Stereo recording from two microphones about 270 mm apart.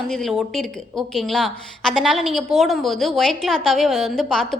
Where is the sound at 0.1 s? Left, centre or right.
Centre.